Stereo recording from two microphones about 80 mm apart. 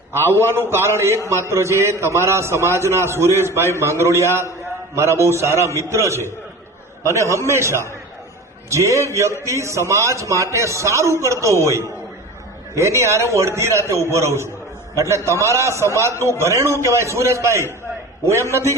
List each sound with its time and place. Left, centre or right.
0.3 s a man's voice: right